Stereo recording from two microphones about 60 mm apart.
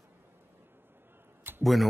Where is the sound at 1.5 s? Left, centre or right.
Right.